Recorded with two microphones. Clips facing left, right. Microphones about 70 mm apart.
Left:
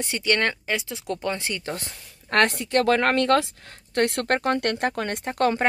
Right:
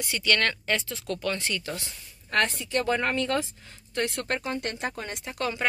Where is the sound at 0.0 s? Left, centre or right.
Left.